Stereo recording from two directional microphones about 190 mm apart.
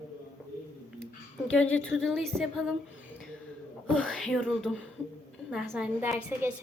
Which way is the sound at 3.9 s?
Centre (ahead or behind).